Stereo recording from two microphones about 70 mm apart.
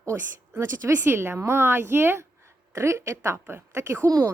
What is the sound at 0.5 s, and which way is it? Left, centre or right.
A woman's voice, right.